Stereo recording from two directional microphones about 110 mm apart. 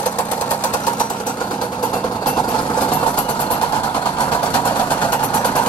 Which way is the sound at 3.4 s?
50° left (ahead or behind).